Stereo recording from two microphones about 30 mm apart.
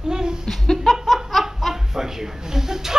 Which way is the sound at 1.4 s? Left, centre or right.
Centre.